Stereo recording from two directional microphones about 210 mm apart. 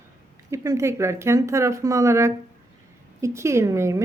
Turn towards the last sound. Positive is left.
turn(degrees=-15)  # may be behind; listen again after turning